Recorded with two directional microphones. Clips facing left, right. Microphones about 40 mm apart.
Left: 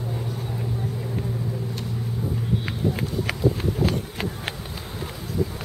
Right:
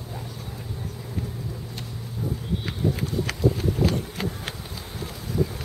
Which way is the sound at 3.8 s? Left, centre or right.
Left.